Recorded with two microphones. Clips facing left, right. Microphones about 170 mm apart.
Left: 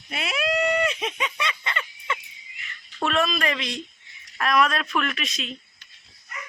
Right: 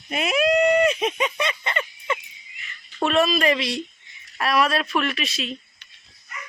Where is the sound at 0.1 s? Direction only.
45° right (ahead or behind).